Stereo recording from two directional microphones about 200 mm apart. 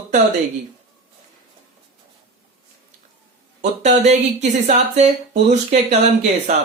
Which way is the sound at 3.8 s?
35° right (ahead or behind).